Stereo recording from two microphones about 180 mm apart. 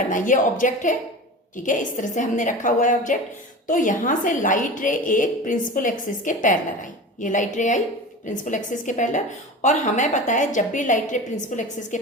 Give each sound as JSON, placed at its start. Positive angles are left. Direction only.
{"t": 0.1, "sound": "a woman's voice", "side_deg": 45}